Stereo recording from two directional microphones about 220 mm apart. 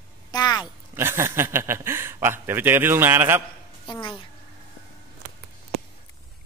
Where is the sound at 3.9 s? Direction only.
20° left (ahead or behind).